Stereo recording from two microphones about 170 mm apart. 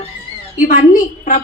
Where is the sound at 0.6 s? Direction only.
50° left (ahead or behind).